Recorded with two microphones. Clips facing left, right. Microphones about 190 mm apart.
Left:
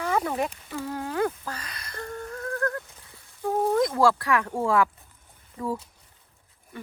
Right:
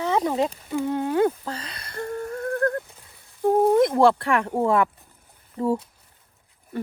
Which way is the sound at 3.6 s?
20° right (ahead or behind).